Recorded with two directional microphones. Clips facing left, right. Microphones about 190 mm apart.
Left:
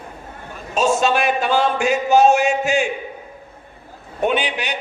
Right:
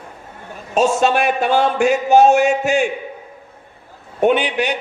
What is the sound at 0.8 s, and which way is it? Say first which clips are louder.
A man's voice: right 2 dB; 60° right (ahead or behind).